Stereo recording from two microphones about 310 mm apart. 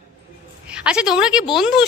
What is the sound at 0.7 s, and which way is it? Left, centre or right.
Speech, centre.